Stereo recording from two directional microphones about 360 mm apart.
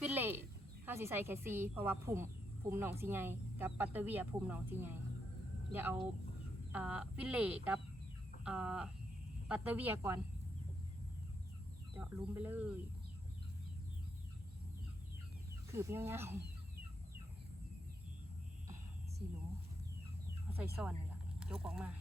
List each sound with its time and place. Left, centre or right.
0.0 s a sound: centre
0.9 s a woman's voice: centre
11.9 s speech: centre
15.7 s a woman's voice: centre
20.8 s speech: centre